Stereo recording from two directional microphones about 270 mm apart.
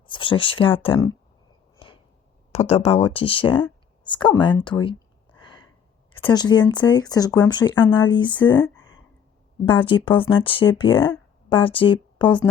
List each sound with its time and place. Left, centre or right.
0.1 s speech: centre
2.5 s speech: left
5.4 s gasp: centre
6.2 s speech: centre